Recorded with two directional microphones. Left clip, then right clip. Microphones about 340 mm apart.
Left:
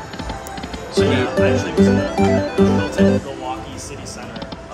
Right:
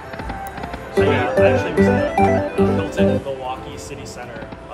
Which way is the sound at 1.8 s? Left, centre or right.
Centre.